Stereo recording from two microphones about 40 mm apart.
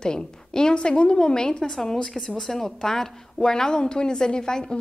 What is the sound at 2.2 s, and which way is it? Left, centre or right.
A woman's voice, centre.